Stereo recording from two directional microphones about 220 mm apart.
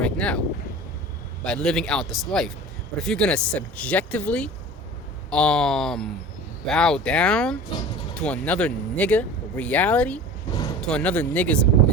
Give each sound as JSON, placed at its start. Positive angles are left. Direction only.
{"t": 0.0, "sound": "wind noise", "side_deg": 5}
{"t": 1.5, "sound": "speech", "side_deg": 0}
{"t": 10.5, "sound": "a sound", "side_deg": 15}
{"t": 10.8, "sound": "speech", "side_deg": 5}